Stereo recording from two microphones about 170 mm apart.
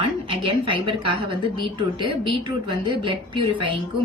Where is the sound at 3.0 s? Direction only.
30° right (ahead or behind).